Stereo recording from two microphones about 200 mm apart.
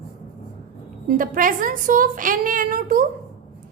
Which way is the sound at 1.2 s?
45° right (ahead or behind).